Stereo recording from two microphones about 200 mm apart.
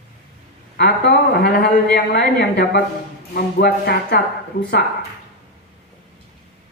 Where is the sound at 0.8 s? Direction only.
55° left (ahead or behind).